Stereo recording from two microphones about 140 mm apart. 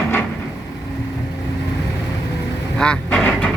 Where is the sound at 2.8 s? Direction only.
5° left (ahead or behind).